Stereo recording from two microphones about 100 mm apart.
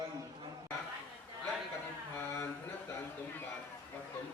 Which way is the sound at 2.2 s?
20° left (ahead or behind).